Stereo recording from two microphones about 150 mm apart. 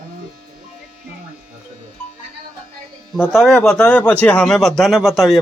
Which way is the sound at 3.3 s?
Centre (ahead or behind).